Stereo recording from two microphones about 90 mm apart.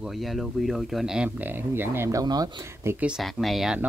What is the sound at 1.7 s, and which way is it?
Speech, 25° right (ahead or behind).